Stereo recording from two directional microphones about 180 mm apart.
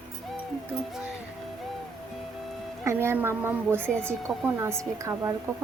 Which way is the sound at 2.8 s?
15° right (ahead or behind).